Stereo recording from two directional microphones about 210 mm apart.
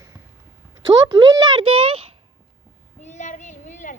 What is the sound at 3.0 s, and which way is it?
Child singing, 35° left (ahead or behind).